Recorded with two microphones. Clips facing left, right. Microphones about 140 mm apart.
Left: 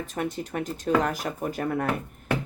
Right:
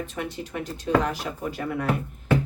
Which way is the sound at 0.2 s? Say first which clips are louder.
Left 5 dB; 45° left (ahead or behind).